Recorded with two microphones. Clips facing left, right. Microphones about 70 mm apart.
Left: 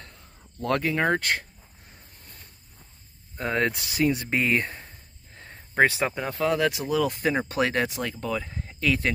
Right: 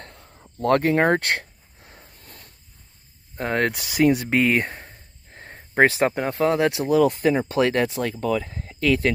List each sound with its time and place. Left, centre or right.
0.0 s a sound: right
0.6 s speech: right
3.3 s speech: right
4.8 s speech: right
7.2 s speech: left
7.9 s speech: right